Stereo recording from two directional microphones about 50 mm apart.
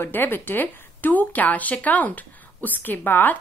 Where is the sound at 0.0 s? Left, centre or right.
Left.